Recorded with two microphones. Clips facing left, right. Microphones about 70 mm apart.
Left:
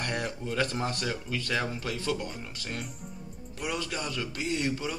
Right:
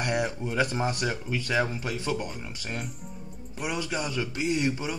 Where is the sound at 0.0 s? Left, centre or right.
Centre.